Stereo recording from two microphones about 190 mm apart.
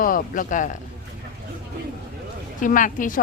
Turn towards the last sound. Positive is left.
turn(degrees=45)  # may be behind; listen again after turning